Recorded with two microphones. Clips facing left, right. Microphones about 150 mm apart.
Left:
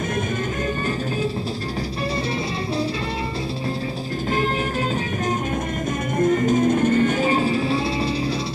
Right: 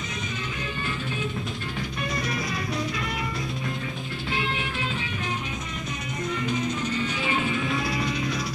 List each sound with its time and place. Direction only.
6.1 s music: 50° left (ahead or behind); by 8.3 s 30° left (ahead or behind)